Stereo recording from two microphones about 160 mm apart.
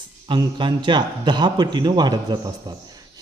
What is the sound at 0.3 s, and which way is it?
A man's voice, 30° right (ahead or behind).